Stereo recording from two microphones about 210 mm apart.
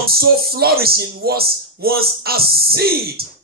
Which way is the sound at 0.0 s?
45° right (ahead or behind).